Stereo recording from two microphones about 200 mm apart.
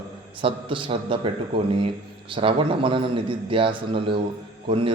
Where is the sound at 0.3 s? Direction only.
25° right (ahead or behind).